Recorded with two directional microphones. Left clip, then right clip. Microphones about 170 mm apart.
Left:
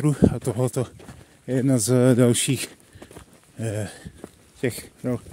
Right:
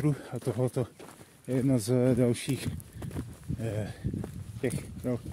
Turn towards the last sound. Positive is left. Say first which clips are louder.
# left 5 dB
turn(degrees=35)  # may be behind; listen again after turning